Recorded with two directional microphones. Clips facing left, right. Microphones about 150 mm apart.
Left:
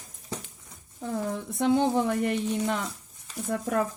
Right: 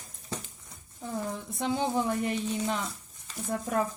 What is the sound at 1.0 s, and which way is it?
Speech, 60° left (ahead or behind).